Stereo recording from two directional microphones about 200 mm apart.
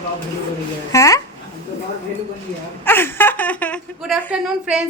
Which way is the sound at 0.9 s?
15° left (ahead or behind).